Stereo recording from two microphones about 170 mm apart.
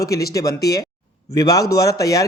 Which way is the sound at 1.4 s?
20° left (ahead or behind).